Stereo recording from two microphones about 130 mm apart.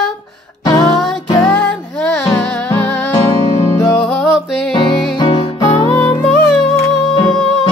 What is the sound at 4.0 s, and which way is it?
Music, centre (ahead or behind).